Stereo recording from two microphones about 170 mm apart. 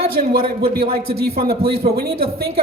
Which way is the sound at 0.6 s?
65° right (ahead or behind).